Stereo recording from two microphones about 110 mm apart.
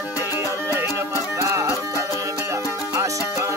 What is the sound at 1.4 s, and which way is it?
Music, 25° right (ahead or behind).